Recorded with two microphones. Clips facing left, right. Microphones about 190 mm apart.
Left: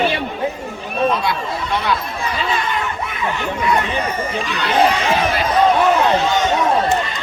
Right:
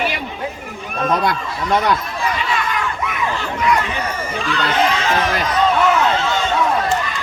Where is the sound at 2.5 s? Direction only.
30° left (ahead or behind).